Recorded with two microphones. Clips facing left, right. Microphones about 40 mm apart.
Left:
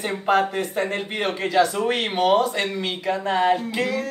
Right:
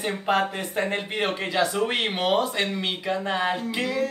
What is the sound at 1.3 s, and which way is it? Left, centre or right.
Speech, centre.